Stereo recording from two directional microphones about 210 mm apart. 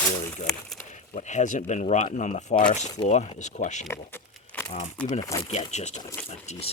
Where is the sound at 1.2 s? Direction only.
35° left (ahead or behind).